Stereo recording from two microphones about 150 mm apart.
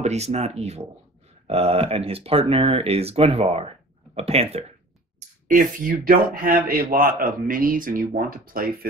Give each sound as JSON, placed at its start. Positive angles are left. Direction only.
{"t": 0.0, "sound": "speech", "side_deg": -45}
{"t": 5.5, "sound": "speech", "side_deg": -60}